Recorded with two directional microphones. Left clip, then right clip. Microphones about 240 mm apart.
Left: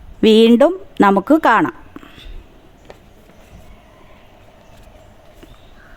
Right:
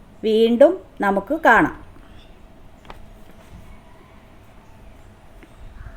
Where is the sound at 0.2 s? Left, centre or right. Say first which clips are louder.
Left 4 dB; left.